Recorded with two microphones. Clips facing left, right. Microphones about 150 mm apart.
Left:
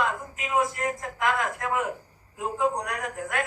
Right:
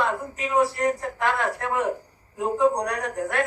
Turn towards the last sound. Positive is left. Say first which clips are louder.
# right 4 dB
turn(degrees=-35)  # may be behind; listen again after turning